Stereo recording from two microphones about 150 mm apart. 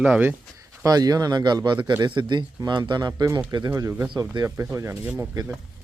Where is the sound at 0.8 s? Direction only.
25° right (ahead or behind).